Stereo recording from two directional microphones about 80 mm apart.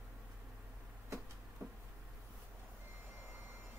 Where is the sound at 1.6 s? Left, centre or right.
Right.